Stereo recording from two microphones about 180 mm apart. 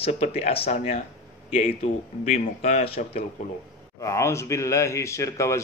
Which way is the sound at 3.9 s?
15° left (ahead or behind).